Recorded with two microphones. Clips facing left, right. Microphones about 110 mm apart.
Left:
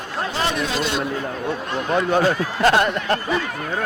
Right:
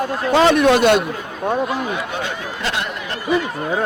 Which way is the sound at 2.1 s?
40° left (ahead or behind).